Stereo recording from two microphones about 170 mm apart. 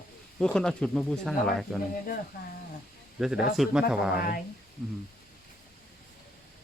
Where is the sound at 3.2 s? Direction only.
Centre (ahead or behind).